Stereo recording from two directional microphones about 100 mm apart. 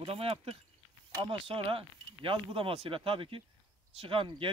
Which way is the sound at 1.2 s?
60° right (ahead or behind).